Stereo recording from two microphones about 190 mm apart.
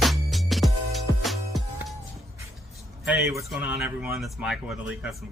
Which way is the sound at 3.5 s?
5° right (ahead or behind).